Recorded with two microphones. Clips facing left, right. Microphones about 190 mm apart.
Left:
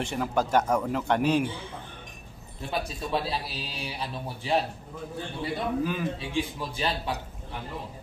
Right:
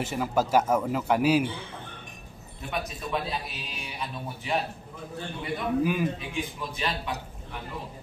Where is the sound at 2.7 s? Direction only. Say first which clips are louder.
Left 2 dB; 30° left (ahead or behind).